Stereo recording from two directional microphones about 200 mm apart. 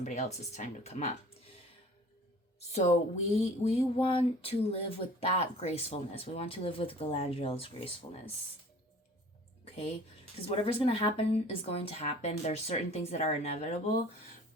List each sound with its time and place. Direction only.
0.0 s speech: 35° left (ahead or behind)
2.6 s speech: 35° left (ahead or behind)
9.6 s a sound: 30° left (ahead or behind)
10.5 s speech: 30° left (ahead or behind)